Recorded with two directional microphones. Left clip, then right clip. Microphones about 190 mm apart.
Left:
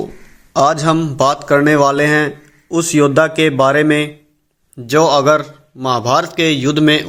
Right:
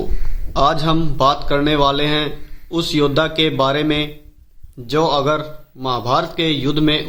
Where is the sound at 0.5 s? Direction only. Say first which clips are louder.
Left 4 dB; 25° left (ahead or behind).